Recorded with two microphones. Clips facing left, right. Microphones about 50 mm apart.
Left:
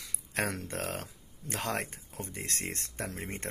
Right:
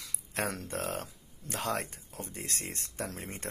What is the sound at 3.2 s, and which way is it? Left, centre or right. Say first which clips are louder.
Speech: left 2 dB; left.